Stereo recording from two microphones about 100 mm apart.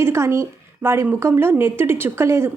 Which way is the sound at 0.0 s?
25° right (ahead or behind).